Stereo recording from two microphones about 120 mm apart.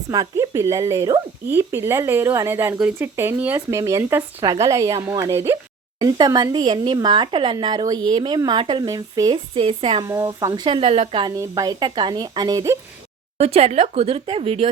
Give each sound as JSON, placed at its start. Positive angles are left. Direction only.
{"t": 0.1, "sound": "speech", "side_deg": -30}
{"t": 6.0, "sound": "speech", "side_deg": -35}
{"t": 9.6, "sound": "speech", "side_deg": -50}
{"t": 10.0, "sound": "speech", "side_deg": -25}
{"t": 10.5, "sound": "speech", "side_deg": -40}
{"t": 10.8, "sound": "speech", "side_deg": -55}
{"t": 11.3, "sound": "speech", "side_deg": -30}
{"t": 13.4, "sound": "speech", "side_deg": -55}